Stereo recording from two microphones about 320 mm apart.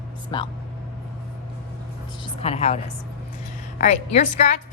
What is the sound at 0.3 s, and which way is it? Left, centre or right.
Speech, centre.